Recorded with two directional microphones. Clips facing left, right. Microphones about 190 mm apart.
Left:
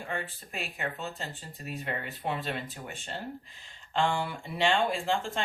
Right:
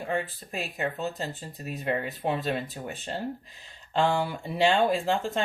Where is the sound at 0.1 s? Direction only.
35° right (ahead or behind).